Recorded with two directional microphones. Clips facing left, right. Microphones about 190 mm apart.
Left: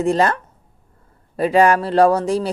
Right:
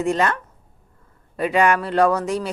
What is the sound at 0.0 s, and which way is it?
Speech, 35° left (ahead or behind).